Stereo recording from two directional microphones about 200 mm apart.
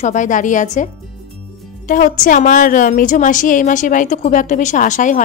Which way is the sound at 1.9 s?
40° left (ahead or behind).